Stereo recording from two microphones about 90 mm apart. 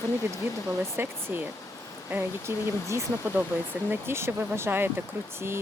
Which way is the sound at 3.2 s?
20° right (ahead or behind).